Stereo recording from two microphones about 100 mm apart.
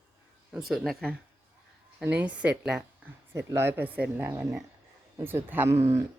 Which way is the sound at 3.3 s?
25° right (ahead or behind).